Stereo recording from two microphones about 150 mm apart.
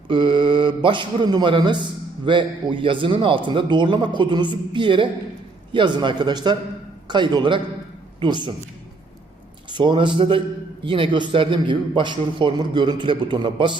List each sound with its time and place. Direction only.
0.1 s a man's voice: 30° right (ahead or behind)
9.6 s a man's voice: 30° right (ahead or behind)